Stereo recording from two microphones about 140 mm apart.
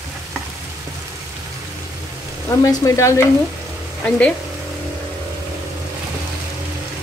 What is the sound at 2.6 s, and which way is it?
Frying, 20° left (ahead or behind).